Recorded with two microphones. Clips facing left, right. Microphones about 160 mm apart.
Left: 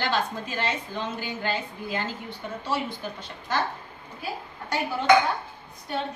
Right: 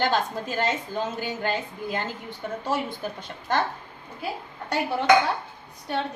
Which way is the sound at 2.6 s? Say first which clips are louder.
Right 1 dB; 50° right (ahead or behind).